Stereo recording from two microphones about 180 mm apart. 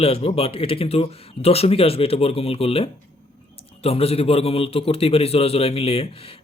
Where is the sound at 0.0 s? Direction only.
35° left (ahead or behind).